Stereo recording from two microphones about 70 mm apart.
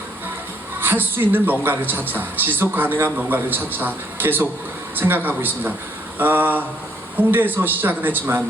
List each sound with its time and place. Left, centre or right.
0.8 s a man's voice: right